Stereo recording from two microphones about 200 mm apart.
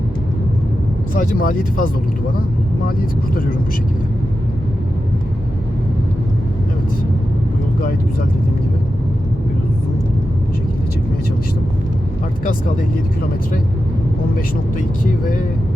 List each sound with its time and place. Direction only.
1.1 s speech: 40° left (ahead or behind)